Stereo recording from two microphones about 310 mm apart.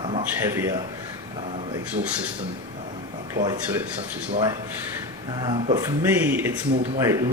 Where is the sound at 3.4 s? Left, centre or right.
Centre.